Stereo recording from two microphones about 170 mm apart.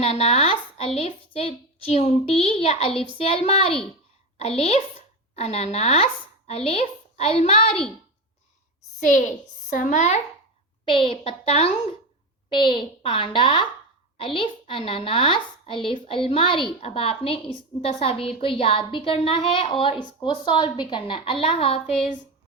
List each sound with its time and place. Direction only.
0.0 s a woman's voice: 35° left (ahead or behind)
9.0 s a woman's voice: 50° left (ahead or behind)
10.8 s a woman's voice: 30° left (ahead or behind)